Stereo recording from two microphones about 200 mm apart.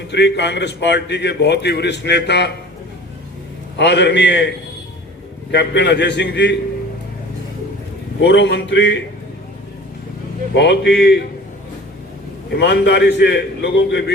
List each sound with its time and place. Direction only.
0.1 s a man's voice: 60° left (ahead or behind)
3.8 s a man's voice: 60° left (ahead or behind)
5.5 s a man's voice: 55° left (ahead or behind)
8.2 s a man's voice: 60° left (ahead or behind)
10.5 s a man's voice: 60° left (ahead or behind)
12.5 s a man's voice: 60° left (ahead or behind)